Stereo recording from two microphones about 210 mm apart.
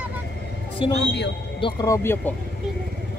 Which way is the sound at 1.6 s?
15° left (ahead or behind).